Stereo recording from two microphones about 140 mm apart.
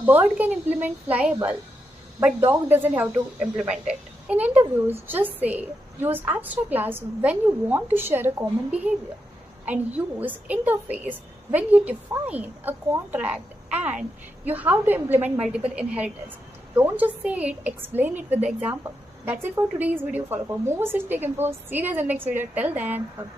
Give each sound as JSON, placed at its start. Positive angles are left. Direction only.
{"t": 0.0, "sound": "a woman's voice", "side_deg": -10}